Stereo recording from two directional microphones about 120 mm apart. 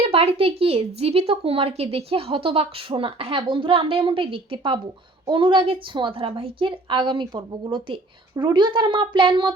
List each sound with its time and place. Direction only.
0.1 s a woman's voice: 55° right (ahead or behind)